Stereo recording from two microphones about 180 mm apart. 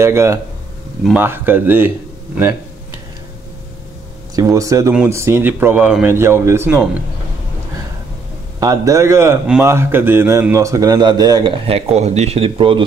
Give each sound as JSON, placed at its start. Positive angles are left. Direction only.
{"t": 0.0, "sound": "speech", "side_deg": -15}
{"t": 4.4, "sound": "speech", "side_deg": -20}
{"t": 8.5, "sound": "speech", "side_deg": -20}
{"t": 11.6, "sound": "speech", "side_deg": -35}